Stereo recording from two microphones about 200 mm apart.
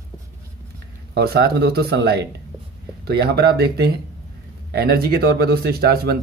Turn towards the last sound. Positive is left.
turn(degrees=-50)  # may be behind; listen again after turning